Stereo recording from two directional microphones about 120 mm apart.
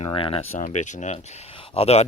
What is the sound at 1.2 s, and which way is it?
Speech, 65° left (ahead or behind).